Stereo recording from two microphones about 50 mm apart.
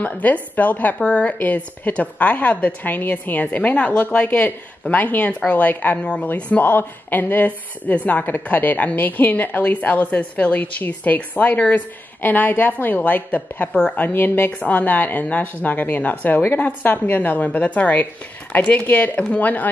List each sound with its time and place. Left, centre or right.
0.0 s speech: left
14.5 s speech: left